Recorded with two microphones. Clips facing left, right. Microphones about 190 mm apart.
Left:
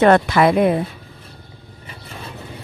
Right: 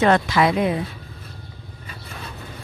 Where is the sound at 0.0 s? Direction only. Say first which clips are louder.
Left 4 dB; 55° left (ahead or behind).